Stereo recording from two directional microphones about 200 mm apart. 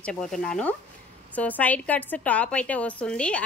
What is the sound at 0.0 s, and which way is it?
Speech, 5° left (ahead or behind).